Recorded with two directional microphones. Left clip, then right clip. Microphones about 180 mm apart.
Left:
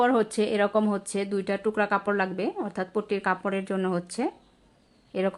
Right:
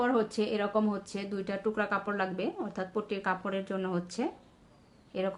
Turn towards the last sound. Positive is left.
turn(degrees=40)  # may be behind; listen again after turning